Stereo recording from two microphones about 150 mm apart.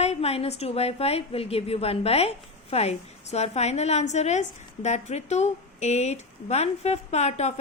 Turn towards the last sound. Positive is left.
turn(degrees=45)  # may be behind; listen again after turning